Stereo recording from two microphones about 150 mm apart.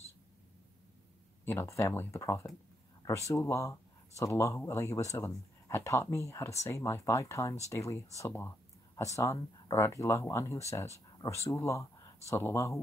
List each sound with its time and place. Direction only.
1.4 s speech: 15° left (ahead or behind)